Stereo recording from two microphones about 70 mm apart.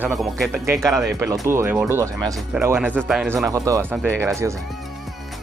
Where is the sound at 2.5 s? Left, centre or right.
Centre.